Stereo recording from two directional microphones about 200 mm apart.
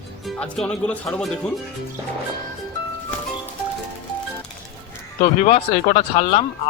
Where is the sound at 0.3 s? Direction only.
5° left (ahead or behind).